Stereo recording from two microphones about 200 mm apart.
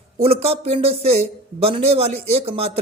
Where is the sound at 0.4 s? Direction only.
30° right (ahead or behind).